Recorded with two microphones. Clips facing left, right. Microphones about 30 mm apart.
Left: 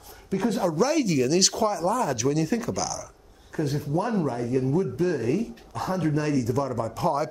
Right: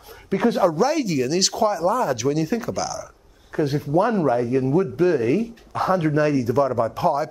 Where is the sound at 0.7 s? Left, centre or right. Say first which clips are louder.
Right 2 dB; centre.